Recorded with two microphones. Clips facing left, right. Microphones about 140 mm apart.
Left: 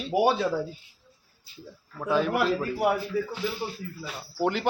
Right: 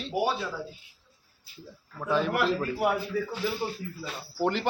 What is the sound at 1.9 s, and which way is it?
Speech, 5° left (ahead or behind).